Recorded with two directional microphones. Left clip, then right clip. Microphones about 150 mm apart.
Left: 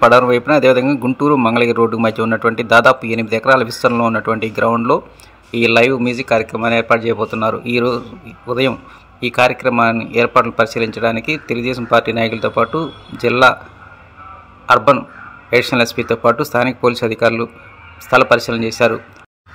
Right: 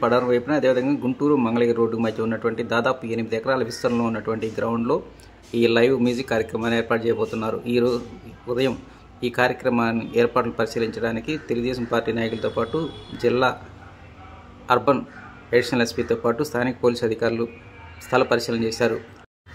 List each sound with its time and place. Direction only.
0.0 s a man's voice: 30° left (ahead or behind)
14.7 s a man's voice: 15° left (ahead or behind)